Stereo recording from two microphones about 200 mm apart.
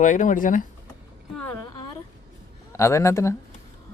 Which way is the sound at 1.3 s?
10° left (ahead or behind).